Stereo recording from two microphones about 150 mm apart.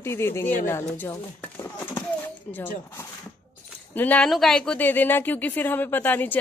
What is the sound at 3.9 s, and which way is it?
Speech, 10° left (ahead or behind).